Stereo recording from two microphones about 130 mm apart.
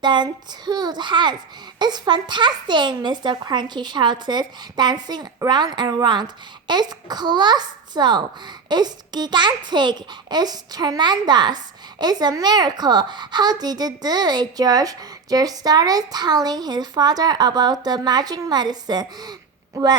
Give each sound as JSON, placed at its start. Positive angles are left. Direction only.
{"t": 0.0, "sound": "a child's voice", "side_deg": -35}